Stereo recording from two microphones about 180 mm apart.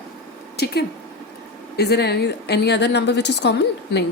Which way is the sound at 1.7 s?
65° left (ahead or behind).